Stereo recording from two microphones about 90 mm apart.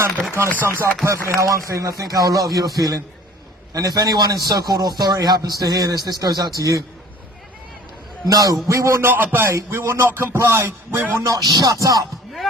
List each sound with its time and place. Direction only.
0.6 s music: 25° right (ahead or behind)
1.0 s a man's voice: 35° right (ahead or behind)
8.3 s speech: 40° right (ahead or behind)
9.0 s music: 20° right (ahead or behind)
11.3 s a man's voice: 40° right (ahead or behind)